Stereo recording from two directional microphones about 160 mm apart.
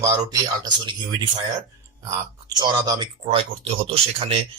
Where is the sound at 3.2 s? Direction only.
40° right (ahead or behind).